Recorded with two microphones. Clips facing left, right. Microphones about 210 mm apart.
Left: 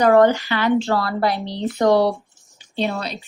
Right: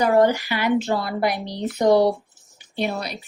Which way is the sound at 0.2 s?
10° right (ahead or behind).